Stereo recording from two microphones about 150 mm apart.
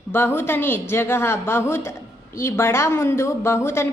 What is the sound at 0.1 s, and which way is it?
A woman's voice, 15° left (ahead or behind).